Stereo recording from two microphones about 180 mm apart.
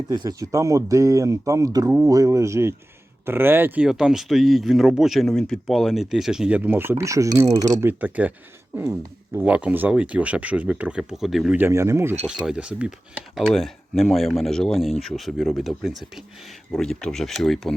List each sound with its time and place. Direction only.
0.1 s speech: 20° right (ahead or behind)
7.4 s speech: 40° right (ahead or behind)
7.8 s speech: 10° right (ahead or behind)